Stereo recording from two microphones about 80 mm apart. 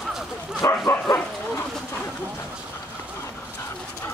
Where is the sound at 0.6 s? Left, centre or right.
Left.